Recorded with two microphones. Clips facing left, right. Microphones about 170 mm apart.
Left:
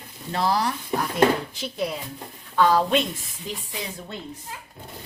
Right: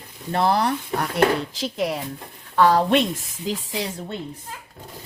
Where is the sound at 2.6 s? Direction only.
65° right (ahead or behind).